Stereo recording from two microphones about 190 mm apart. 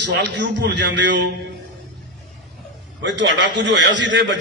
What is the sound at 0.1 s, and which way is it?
A man's voice, 65° right (ahead or behind).